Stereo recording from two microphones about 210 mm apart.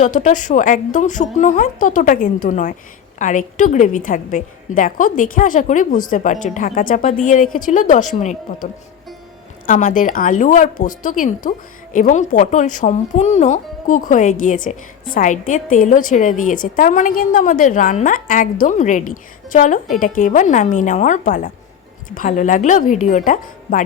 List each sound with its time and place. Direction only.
0.0 s speech: 35° left (ahead or behind)
9.6 s a woman's voice: 40° left (ahead or behind)